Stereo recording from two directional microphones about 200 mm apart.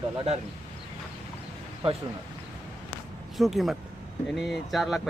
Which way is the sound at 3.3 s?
Centre (ahead or behind).